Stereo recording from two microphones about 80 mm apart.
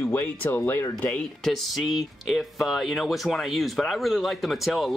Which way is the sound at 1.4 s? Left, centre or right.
Centre.